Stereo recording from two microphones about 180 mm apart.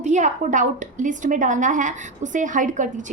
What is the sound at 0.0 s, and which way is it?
A woman's voice, 40° right (ahead or behind).